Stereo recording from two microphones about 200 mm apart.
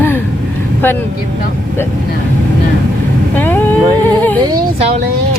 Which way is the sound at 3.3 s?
10° left (ahead or behind).